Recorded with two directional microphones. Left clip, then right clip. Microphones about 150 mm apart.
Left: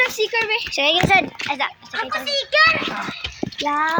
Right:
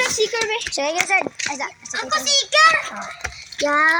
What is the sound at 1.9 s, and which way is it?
Speech, 10° left (ahead or behind).